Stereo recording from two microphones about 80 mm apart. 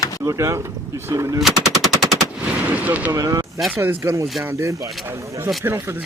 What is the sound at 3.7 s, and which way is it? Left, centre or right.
Speech, right.